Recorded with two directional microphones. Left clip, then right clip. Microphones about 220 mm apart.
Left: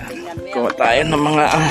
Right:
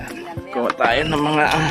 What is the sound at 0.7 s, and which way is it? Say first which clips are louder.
Speech: left 4 dB; 20° left (ahead or behind).